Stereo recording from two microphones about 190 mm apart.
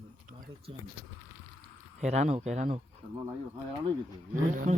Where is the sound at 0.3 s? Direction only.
45° right (ahead or behind).